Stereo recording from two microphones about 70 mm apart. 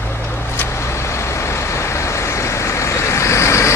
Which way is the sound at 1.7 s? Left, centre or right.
Left.